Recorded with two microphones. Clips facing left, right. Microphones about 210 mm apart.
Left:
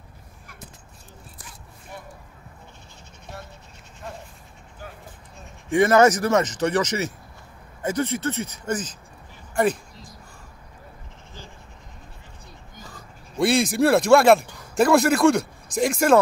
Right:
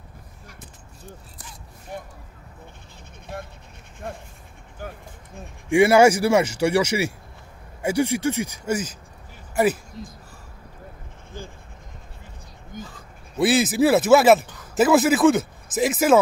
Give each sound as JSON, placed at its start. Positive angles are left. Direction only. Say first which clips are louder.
{"t": 5.7, "sound": "speech", "louder": "right 2 dB", "side_deg": -10}
{"t": 10.0, "sound": "speech", "louder": "right 9 dB", "side_deg": -50}
{"t": 12.7, "sound": "pig", "louder": "right 10 dB", "side_deg": -50}
{"t": 13.4, "sound": "speech", "louder": "right 1 dB", "side_deg": -5}